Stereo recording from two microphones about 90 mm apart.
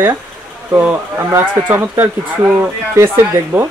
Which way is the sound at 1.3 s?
25° right (ahead or behind).